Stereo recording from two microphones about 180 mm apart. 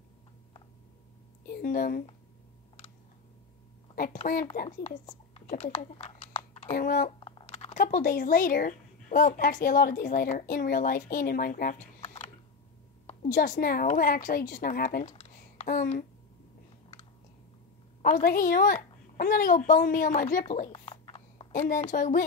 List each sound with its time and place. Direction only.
1.4 s a woman's voice: 55° left (ahead or behind)
3.9 s a woman's voice: 50° left (ahead or behind)
5.5 s a sound: 35° left (ahead or behind)
6.7 s a woman's voice: 50° left (ahead or behind)
7.2 s speech: 25° left (ahead or behind); by 11.7 s 50° left (ahead or behind)
12.0 s a sound: 35° left (ahead or behind)
13.0 s a woman's voice: 45° left (ahead or behind)
18.0 s a woman's voice: 50° left (ahead or behind)
20.4 s a sound: 35° left (ahead or behind)
21.5 s a woman's voice: 50° left (ahead or behind)